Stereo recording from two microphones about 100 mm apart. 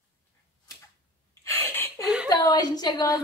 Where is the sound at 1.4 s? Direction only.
30° left (ahead or behind).